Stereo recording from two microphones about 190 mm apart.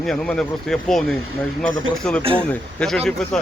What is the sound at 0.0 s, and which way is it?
Speech, 5° left (ahead or behind).